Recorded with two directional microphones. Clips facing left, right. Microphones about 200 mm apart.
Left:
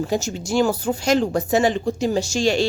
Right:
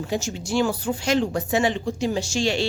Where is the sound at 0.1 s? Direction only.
40° left (ahead or behind).